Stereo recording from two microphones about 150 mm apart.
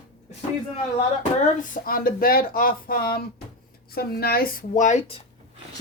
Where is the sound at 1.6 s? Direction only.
70° left (ahead or behind).